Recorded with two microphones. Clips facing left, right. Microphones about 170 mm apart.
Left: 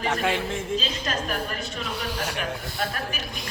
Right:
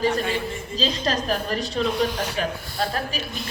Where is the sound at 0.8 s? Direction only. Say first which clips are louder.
Right 5 dB; 35° right (ahead or behind).